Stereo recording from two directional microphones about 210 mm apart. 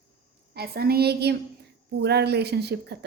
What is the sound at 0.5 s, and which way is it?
A woman's voice, 50° right (ahead or behind).